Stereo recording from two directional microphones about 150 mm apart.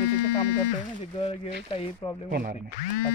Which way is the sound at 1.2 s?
40° left (ahead or behind).